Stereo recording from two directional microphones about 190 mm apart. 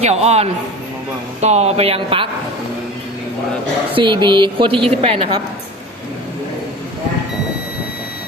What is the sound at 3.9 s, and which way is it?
A woman's voice, 25° right (ahead or behind).